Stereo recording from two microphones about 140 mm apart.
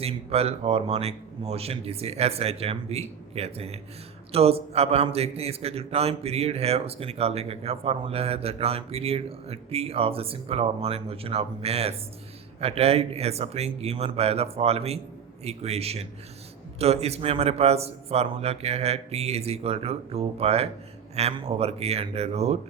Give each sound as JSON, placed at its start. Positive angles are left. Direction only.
{"t": 0.0, "sound": "a man's voice", "side_deg": -45}